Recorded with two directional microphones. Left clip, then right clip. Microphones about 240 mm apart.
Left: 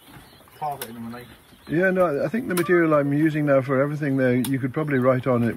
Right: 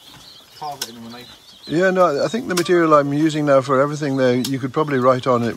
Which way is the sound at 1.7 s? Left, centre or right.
Centre.